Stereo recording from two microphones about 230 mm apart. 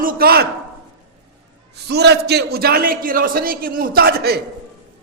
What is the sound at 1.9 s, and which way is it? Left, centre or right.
A man's voice, right.